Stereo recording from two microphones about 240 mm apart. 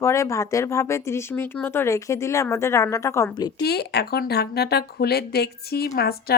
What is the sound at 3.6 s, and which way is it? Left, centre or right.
Speech, left.